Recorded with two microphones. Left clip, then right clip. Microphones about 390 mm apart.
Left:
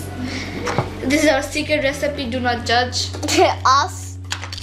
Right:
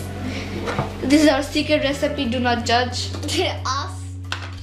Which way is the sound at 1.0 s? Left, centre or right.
Right.